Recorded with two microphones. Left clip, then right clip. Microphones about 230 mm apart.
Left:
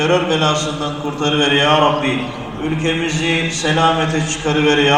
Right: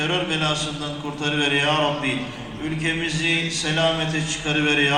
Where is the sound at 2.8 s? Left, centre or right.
Right.